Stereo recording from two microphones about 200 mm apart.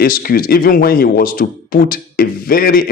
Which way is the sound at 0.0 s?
45° left (ahead or behind).